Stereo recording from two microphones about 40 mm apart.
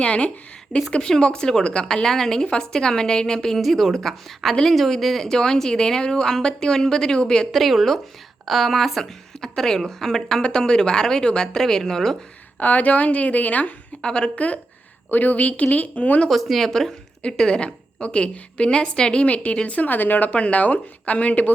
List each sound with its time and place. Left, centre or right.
0.0 s a woman's voice: left
3.6 s a woman's voice: centre
7.5 s a woman's voice: centre
11.6 s speech: centre
12.5 s a woman's voice: left
14.0 s a woman's voice: left
14.3 s a woman's voice: left
15.1 s a woman's voice: left
16.3 s a woman's voice: centre
17.6 s a woman's voice: left
20.3 s a woman's voice: left